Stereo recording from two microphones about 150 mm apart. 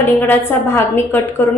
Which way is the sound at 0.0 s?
15° left (ahead or behind).